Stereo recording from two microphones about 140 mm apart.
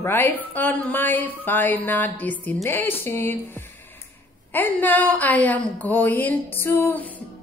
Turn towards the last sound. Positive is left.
turn(degrees=15)  # may be behind; listen again after turning